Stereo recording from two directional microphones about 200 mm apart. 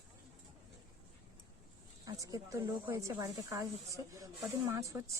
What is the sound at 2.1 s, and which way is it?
A woman's voice, 15° right (ahead or behind).